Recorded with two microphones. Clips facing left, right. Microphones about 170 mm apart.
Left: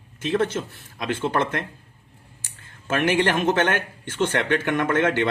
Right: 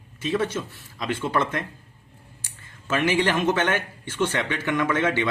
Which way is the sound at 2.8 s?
55° left (ahead or behind).